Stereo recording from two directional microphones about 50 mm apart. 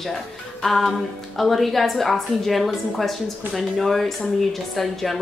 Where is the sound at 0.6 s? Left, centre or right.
Centre.